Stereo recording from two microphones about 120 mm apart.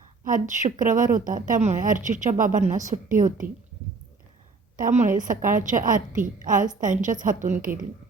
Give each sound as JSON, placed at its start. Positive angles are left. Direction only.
{"t": 0.3, "sound": "a woman's voice", "side_deg": -90}
{"t": 4.8, "sound": "a woman's voice", "side_deg": -85}